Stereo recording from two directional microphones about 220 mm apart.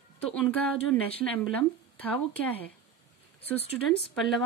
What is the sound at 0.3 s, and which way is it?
Speech, 5° left (ahead or behind).